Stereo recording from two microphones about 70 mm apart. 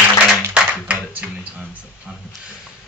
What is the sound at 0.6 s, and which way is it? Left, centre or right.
Clapping, centre.